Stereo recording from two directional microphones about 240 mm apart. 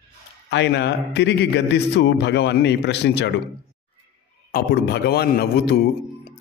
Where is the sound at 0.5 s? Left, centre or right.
Left.